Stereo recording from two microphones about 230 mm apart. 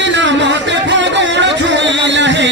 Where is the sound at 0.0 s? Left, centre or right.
Right.